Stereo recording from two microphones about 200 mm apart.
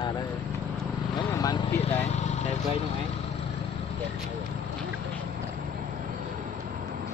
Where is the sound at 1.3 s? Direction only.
20° left (ahead or behind).